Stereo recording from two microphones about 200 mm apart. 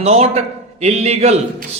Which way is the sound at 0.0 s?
30° right (ahead or behind).